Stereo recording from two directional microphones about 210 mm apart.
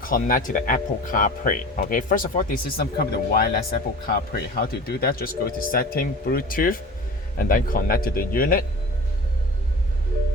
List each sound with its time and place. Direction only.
0.0 s speech: 40° left (ahead or behind)